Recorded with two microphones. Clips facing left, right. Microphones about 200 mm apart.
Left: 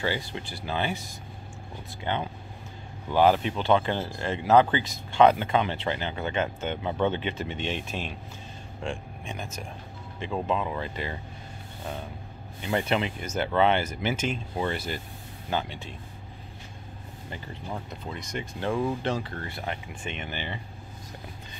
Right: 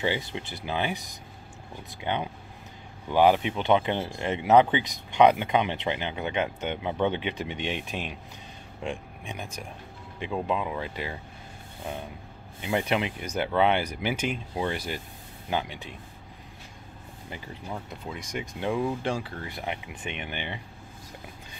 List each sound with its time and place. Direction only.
0.0 s speech: 20° right (ahead or behind)
12.6 s speech: 10° right (ahead or behind)
17.6 s speech: centre (ahead or behind)